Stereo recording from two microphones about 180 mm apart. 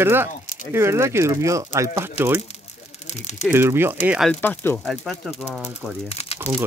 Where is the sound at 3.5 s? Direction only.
15° right (ahead or behind).